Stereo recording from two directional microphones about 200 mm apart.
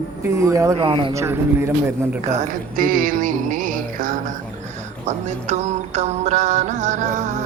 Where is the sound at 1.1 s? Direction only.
15° right (ahead or behind).